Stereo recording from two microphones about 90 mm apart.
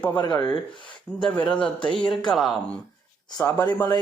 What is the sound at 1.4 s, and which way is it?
Speech, 10° left (ahead or behind).